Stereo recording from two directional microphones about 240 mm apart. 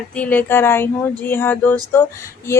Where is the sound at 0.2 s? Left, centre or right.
Centre.